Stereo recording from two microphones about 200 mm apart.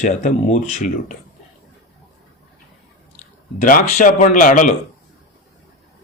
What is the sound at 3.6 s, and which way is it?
Speech, 40° left (ahead or behind).